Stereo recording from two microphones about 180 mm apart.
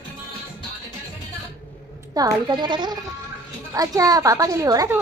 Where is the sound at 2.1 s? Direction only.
20° right (ahead or behind).